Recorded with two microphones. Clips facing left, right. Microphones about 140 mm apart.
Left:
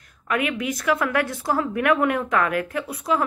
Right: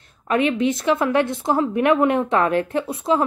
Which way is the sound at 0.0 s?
30° right (ahead or behind).